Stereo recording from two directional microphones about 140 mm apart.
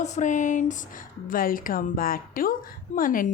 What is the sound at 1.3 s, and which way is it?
A woman's voice, 85° left.